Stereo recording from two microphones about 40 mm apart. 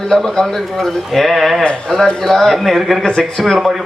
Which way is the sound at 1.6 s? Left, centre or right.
Left.